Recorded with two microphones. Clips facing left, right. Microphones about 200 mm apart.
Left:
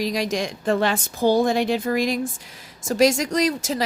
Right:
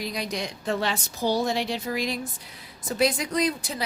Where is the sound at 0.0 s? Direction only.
90° left.